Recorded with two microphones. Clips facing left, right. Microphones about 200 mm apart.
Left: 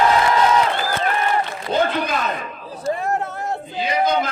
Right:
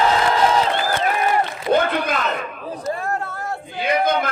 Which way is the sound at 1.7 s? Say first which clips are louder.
Right 2 dB; 55° right (ahead or behind).